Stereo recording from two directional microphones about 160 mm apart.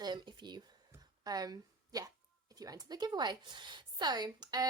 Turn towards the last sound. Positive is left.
turn(degrees=-25)  # may be behind; listen again after turning